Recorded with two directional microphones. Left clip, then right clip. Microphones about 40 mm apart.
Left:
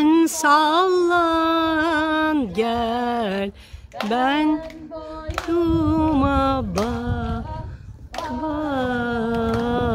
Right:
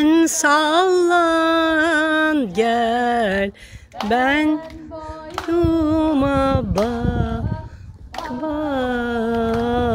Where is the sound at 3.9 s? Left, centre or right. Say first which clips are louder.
Right 4 dB; right.